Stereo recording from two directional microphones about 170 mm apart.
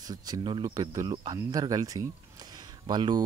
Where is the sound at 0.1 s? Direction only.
25° right (ahead or behind).